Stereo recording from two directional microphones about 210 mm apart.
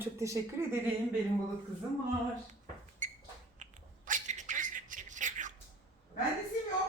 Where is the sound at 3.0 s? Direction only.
35° right (ahead or behind).